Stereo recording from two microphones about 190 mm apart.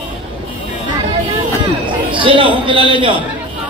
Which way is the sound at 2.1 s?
25° right (ahead or behind).